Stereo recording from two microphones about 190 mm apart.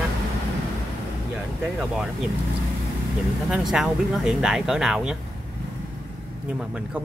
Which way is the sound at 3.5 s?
5° right (ahead or behind).